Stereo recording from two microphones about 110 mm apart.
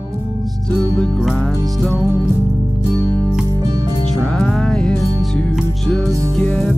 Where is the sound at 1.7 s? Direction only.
Centre (ahead or behind).